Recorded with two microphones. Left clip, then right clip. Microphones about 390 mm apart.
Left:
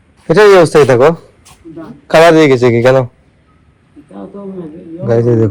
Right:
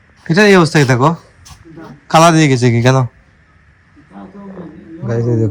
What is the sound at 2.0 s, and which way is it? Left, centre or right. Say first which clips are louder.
Speech: left 4 dB; centre.